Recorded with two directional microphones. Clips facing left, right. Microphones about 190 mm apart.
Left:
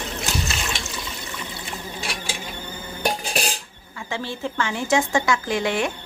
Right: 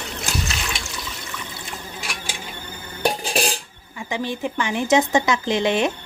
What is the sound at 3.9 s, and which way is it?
A woman's voice, 15° right (ahead or behind).